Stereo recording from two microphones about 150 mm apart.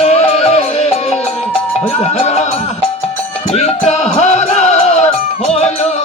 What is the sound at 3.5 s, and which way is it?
Music, 45° left (ahead or behind).